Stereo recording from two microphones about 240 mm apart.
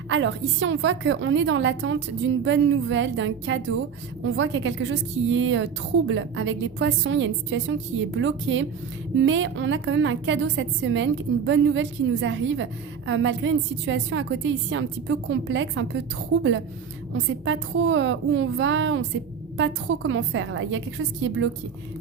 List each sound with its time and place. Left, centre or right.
0.1 s a woman's voice: right